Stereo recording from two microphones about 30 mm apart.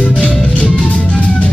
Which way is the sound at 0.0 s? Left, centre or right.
Left.